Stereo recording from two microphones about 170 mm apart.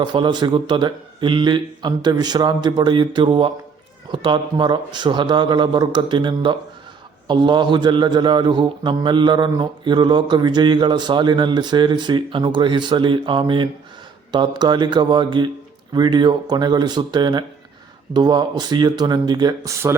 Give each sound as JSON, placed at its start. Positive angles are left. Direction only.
{"t": 0.0, "sound": "a man's voice", "side_deg": -25}